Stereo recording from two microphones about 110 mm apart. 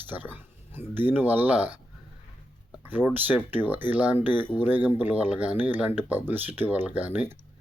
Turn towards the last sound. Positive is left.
turn(degrees=-15)  # may be behind; listen again after turning